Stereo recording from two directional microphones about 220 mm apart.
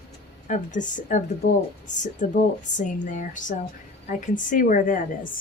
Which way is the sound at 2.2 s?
35° left (ahead or behind).